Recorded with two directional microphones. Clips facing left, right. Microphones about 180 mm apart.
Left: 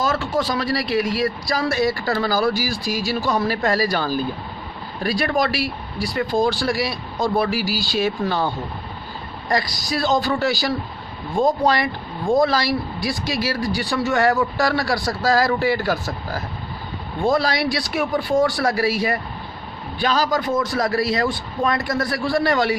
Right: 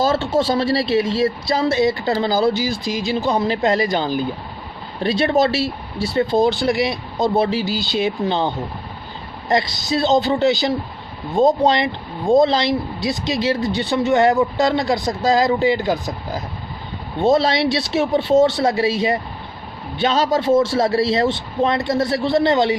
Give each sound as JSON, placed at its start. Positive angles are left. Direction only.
{"t": 0.0, "sound": "speech", "side_deg": -25}